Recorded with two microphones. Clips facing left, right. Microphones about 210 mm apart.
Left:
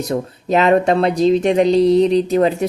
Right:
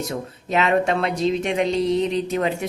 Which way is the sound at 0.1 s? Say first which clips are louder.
Left 7 dB; 40° left (ahead or behind).